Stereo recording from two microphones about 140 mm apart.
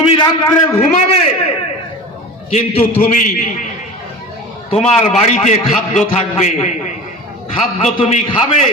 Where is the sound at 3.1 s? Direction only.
70° left (ahead or behind).